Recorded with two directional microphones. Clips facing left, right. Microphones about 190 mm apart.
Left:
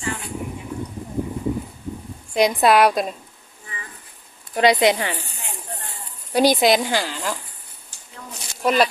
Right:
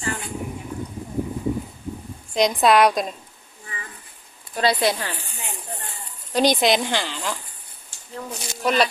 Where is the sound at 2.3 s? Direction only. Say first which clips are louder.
Left 1 dB; 5° left (ahead or behind).